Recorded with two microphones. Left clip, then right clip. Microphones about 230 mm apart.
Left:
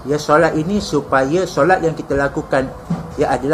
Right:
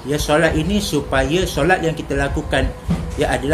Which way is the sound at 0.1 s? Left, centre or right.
Right.